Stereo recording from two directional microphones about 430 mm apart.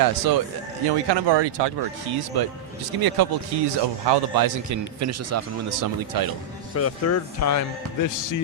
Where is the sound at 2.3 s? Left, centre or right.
Right.